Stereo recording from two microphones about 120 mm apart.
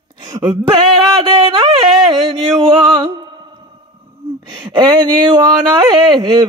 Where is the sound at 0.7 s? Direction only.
40° right (ahead or behind).